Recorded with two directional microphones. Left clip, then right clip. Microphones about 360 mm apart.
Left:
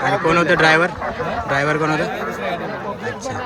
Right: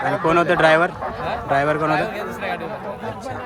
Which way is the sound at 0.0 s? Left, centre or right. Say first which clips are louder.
Left 2 dB; centre.